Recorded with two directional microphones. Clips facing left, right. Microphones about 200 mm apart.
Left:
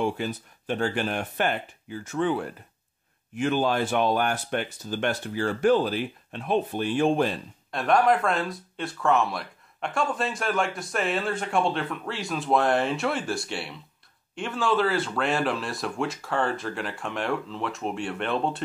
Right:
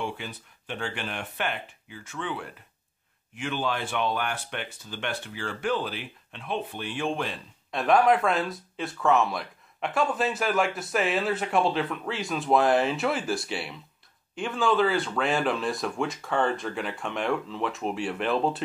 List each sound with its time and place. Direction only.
0.0 s speech: 40° left (ahead or behind)
7.7 s speech: centre (ahead or behind)